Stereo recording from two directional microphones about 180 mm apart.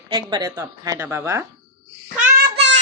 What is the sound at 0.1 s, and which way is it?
A woman's voice, 25° right (ahead or behind).